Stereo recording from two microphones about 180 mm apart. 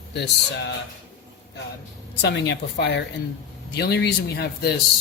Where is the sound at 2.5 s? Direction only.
75° left (ahead or behind).